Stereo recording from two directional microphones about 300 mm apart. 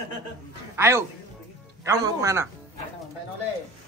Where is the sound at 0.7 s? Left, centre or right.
Centre.